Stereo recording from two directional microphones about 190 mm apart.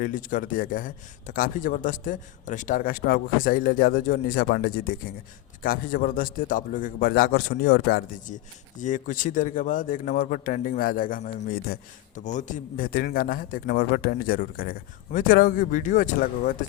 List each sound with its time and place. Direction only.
0.0 s a man's voice: 45° left (ahead or behind)